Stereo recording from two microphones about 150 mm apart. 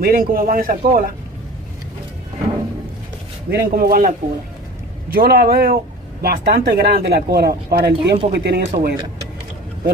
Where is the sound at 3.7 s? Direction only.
80° right.